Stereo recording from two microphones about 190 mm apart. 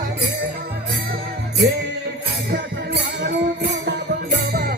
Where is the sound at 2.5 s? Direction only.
55° right (ahead or behind).